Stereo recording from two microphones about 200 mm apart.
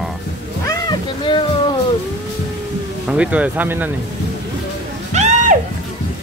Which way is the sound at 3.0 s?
5° right (ahead or behind).